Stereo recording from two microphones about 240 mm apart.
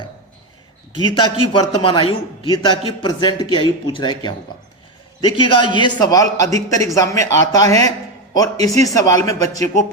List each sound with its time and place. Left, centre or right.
1.2 s a man's voice: centre